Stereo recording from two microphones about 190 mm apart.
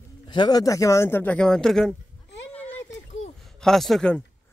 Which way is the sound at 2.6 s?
10° left (ahead or behind).